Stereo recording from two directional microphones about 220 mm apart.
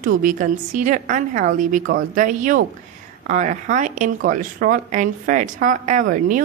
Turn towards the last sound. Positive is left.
turn(degrees=-35)  # may be behind; listen again after turning